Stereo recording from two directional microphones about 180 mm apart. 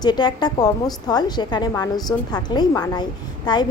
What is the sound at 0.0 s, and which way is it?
A woman's voice, 25° left (ahead or behind).